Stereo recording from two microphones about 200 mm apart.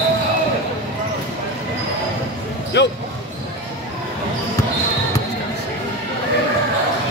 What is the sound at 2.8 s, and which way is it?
Speech, 60° left (ahead or behind).